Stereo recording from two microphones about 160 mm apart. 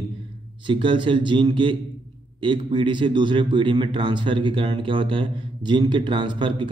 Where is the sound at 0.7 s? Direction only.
30° right (ahead or behind).